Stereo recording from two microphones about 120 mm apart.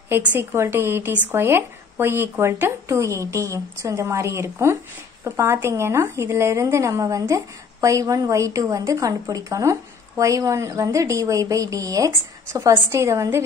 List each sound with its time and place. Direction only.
0.1 s a woman's voice: 15° right (ahead or behind)